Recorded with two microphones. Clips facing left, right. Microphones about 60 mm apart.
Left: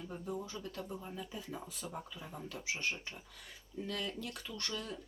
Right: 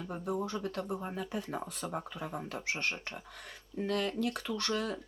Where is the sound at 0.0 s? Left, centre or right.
Right.